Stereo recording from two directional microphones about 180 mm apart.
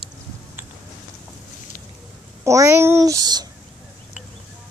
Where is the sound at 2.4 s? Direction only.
15° right (ahead or behind).